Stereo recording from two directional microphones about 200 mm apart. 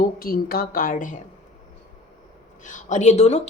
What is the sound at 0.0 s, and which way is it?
Speech, 45° left (ahead or behind).